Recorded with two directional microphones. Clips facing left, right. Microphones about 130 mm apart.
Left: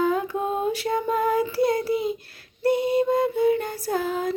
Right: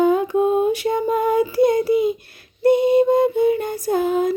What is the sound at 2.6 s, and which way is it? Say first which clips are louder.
Female singing: right 6 dB; 20° right (ahead or behind).